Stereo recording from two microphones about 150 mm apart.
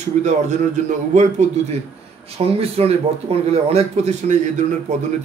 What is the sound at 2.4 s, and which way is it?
Speech, 40° right (ahead or behind).